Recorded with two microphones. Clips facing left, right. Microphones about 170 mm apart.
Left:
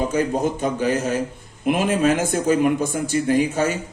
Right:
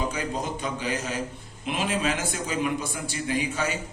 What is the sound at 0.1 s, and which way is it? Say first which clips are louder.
A man's voice: left 9 dB; 45° left (ahead or behind).